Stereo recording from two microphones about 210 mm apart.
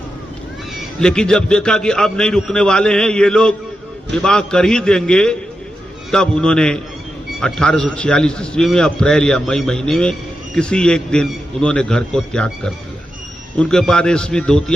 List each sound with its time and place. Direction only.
0.9 s a man's voice: 5° left (ahead or behind)